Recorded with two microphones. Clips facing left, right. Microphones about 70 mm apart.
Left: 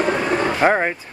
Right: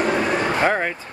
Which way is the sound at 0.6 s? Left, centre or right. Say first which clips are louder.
Left 6 dB; centre.